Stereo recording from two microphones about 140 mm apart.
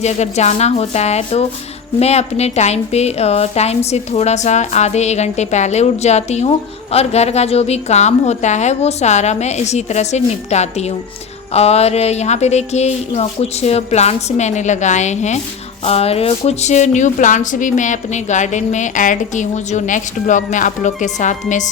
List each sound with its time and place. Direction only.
0.0 s a woman's voice: 55° left (ahead or behind)